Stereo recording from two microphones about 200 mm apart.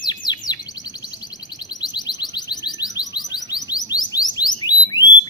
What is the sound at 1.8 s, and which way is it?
Music, 20° left (ahead or behind).